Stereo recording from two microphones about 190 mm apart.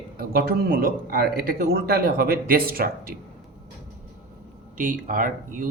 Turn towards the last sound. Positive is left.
turn(degrees=-45)  # may be behind; listen again after turning